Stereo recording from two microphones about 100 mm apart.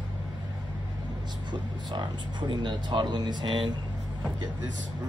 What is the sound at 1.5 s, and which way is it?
Speech, 50° right (ahead or behind).